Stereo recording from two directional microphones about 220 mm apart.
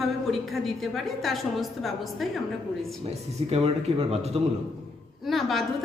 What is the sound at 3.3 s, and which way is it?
Speech, 25° right (ahead or behind).